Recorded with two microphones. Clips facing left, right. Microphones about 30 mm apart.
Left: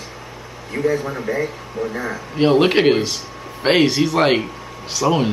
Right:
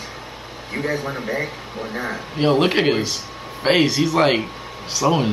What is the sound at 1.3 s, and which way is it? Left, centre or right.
Speech, right.